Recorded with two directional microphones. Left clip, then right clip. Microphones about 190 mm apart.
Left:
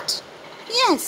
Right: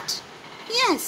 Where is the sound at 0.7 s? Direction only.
20° left (ahead or behind).